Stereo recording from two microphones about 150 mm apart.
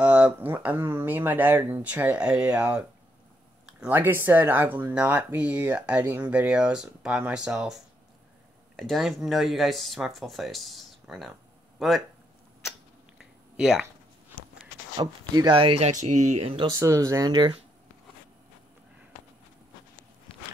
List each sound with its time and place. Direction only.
0.0 s speech: 10° right (ahead or behind)
13.2 s a sound: 5° right (ahead or behind)
15.0 s speech: 30° right (ahead or behind)
15.9 s speech: 55° right (ahead or behind)
16.7 s speech: 20° right (ahead or behind)